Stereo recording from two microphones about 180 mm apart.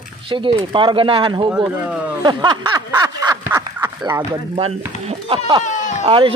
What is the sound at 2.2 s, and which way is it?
Speech, 25° right (ahead or behind).